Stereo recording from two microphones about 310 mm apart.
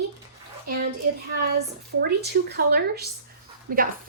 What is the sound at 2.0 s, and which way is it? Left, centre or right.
A woman's voice, right.